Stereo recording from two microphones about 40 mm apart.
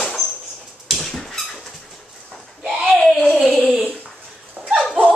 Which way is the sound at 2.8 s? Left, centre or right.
Centre.